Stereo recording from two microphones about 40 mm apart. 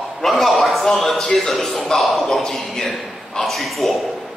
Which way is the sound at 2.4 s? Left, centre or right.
Centre.